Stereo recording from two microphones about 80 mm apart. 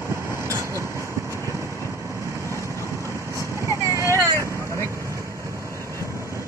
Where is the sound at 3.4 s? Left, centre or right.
Right.